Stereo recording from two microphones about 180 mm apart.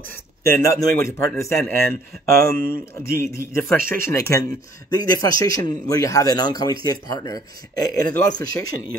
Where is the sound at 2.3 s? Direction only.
55° right (ahead or behind).